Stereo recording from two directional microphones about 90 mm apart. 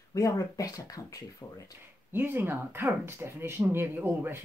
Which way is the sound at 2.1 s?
25° right (ahead or behind).